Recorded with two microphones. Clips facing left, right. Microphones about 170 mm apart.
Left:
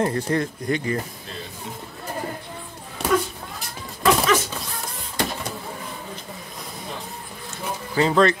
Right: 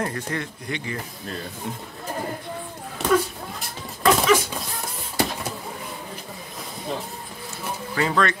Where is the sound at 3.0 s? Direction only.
5° right (ahead or behind).